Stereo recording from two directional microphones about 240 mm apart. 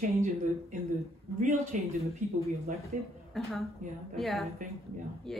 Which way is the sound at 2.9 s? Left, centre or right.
Right.